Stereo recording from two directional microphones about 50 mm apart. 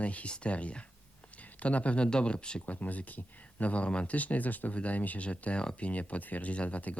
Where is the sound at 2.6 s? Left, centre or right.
Left.